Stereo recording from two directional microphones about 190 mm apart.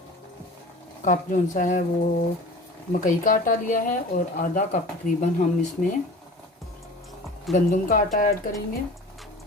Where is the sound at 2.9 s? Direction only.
45° left (ahead or behind).